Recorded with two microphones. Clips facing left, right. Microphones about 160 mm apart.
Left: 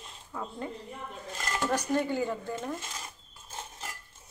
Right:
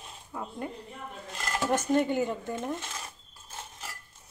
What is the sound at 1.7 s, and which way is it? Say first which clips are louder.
Speech: right 4 dB; 20° right (ahead or behind).